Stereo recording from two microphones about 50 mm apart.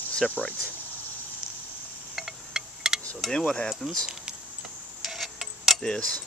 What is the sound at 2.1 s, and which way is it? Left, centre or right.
Wind chime, centre.